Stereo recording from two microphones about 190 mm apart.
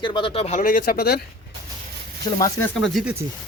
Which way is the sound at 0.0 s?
25° left (ahead or behind).